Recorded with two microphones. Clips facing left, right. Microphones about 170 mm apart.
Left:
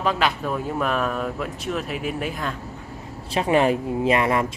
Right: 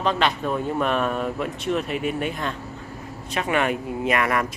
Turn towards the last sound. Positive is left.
turn(degrees=25)  # may be behind; listen again after turning